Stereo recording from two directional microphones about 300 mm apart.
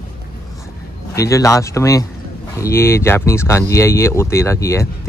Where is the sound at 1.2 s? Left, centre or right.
Centre.